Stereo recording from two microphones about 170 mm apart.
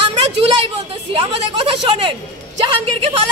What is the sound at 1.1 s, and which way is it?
A woman's voice, 30° right (ahead or behind).